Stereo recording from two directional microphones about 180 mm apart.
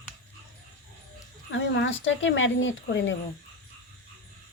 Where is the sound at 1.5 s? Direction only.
85° left.